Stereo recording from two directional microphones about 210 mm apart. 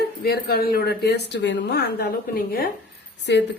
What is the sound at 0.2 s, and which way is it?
Speech, 45° left (ahead or behind).